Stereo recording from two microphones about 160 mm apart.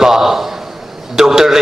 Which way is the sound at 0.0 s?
5° right (ahead or behind).